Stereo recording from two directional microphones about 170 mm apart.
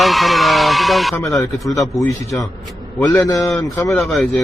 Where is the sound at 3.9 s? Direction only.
Centre (ahead or behind).